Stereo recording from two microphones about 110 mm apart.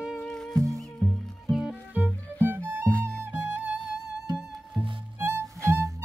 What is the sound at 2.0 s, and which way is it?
Music, 15° left (ahead or behind).